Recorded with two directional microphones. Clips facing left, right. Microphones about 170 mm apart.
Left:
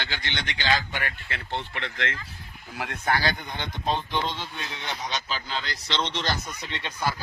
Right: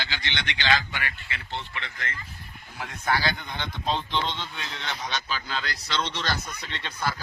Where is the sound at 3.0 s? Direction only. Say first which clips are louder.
Even; 50° left (ahead or behind).